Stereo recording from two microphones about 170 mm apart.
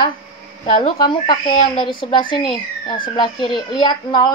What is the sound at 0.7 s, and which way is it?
Speech, 25° left (ahead or behind).